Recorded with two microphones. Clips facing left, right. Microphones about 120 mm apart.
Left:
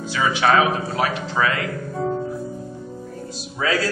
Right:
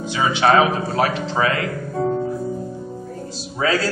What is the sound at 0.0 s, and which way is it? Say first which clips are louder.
A man's voice: right 2 dB; 25° right (ahead or behind).